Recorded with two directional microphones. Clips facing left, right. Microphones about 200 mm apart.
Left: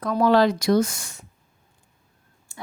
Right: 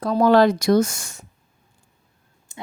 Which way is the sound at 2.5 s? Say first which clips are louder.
Right 3 dB; 20° right (ahead or behind).